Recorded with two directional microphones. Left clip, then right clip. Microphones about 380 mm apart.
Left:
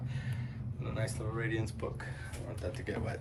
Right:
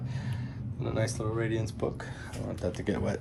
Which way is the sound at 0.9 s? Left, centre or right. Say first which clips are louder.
Right 7 dB; centre.